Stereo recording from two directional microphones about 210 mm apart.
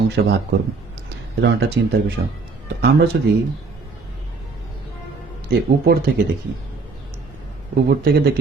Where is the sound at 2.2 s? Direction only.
50° right (ahead or behind).